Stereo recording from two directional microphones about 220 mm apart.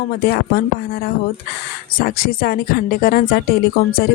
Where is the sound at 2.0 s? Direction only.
40° left (ahead or behind).